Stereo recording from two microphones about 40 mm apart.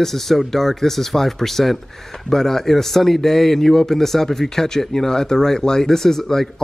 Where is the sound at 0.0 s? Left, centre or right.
Centre.